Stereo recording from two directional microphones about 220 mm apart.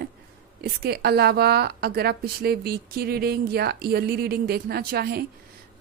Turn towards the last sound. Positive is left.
turn(degrees=-45)  # may be behind; listen again after turning